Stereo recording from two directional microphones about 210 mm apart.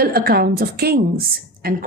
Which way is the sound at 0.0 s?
45° right (ahead or behind).